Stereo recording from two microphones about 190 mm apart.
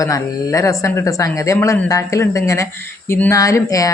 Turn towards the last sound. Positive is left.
turn(degrees=15)  # may be behind; listen again after turning